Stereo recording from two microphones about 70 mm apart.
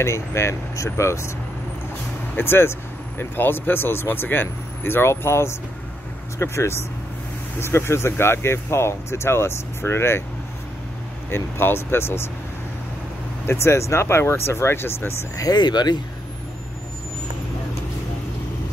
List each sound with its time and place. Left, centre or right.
0.0 s speech: left
2.3 s speech: left
11.2 s speech: left
13.5 s speech: left
15.3 s speech: left